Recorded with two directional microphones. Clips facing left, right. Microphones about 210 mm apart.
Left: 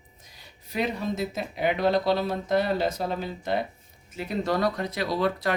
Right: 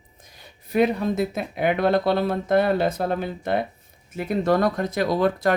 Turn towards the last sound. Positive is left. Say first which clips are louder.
# right 5 dB
turn(degrees=-50)  # may be behind; listen again after turning